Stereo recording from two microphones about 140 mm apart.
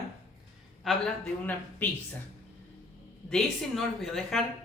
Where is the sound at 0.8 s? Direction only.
Centre (ahead or behind).